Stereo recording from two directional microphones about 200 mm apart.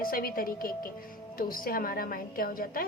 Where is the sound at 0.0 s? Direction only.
45° left (ahead or behind).